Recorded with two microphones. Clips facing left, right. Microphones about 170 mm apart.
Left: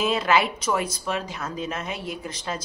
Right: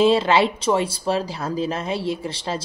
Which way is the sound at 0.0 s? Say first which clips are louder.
Right 6 dB; 30° right (ahead or behind).